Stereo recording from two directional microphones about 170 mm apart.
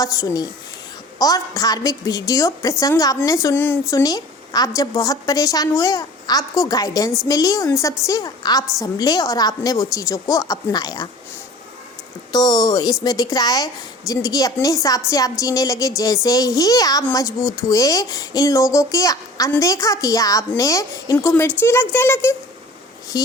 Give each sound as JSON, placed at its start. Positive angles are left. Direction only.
{"t": 0.0, "sound": "speech", "side_deg": 20}
{"t": 12.3, "sound": "speech", "side_deg": 25}